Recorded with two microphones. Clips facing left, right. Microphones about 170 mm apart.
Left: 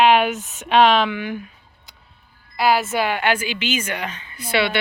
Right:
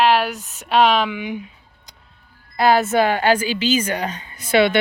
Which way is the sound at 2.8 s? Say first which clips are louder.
Right 4 dB; 40° right (ahead or behind).